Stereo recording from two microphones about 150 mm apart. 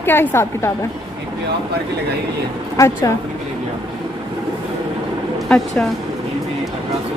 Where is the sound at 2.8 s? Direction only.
20° left (ahead or behind).